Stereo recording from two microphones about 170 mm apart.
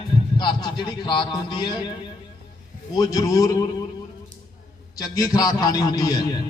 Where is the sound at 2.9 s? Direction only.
20° left (ahead or behind).